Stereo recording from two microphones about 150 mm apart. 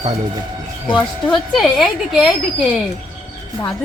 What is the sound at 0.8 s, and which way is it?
Speech, 35° left (ahead or behind).